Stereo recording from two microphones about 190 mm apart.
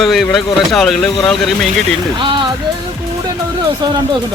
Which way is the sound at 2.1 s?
25° right (ahead or behind).